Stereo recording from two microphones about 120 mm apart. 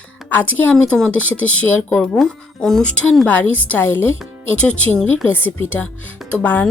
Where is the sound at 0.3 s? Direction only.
15° left (ahead or behind).